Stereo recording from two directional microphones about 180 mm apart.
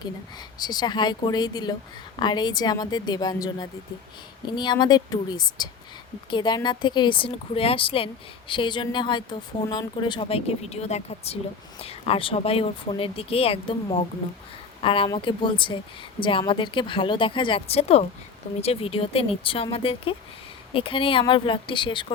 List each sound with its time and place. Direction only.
0.6 s a woman's voice: 25° left (ahead or behind)